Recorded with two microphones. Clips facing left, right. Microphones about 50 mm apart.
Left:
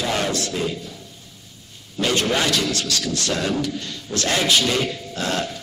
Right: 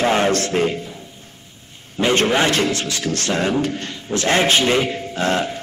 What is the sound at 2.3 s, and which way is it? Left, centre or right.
A man's voice, right.